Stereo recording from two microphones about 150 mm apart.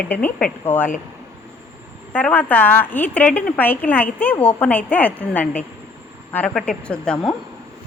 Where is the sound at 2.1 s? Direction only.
10° left (ahead or behind).